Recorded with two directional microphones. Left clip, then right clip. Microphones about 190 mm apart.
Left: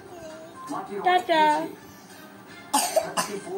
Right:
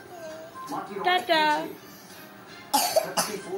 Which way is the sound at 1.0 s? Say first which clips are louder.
Left 2 dB; 20° left (ahead or behind).